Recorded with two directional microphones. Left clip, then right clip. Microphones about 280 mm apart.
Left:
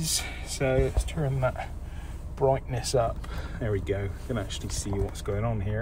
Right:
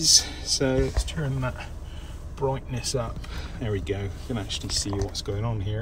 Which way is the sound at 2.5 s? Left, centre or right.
Centre.